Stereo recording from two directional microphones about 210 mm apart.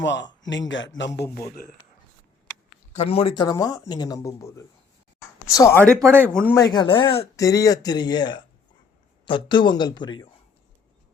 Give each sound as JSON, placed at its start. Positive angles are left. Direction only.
{"t": 0.0, "sound": "a man's voice", "side_deg": 55}
{"t": 2.9, "sound": "speech", "side_deg": 30}
{"t": 6.1, "sound": "speech", "side_deg": -10}
{"t": 6.5, "sound": "speech", "side_deg": 20}